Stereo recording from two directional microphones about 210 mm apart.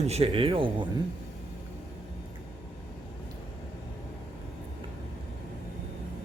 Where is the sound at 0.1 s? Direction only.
30° right (ahead or behind).